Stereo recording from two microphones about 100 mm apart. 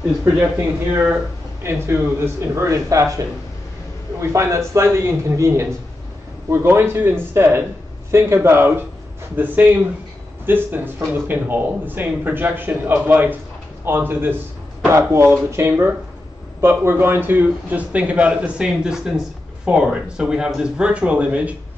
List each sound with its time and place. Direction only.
0.6 s a man's voice: 25° right (ahead or behind)